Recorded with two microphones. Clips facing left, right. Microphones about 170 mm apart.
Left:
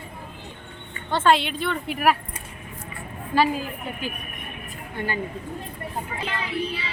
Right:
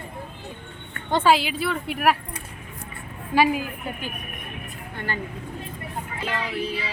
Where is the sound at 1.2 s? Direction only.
5° right (ahead or behind).